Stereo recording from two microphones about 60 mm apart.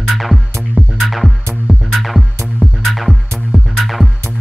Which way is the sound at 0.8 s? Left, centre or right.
Right.